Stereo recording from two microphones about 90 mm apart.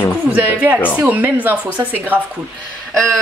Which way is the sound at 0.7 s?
20° left (ahead or behind).